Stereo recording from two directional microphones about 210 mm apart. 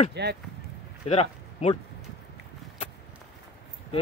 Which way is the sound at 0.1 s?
55° right (ahead or behind).